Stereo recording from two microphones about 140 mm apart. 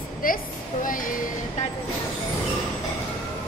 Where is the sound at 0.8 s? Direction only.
75° left (ahead or behind).